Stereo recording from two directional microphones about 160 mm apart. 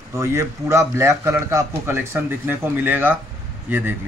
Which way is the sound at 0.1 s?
20° right (ahead or behind).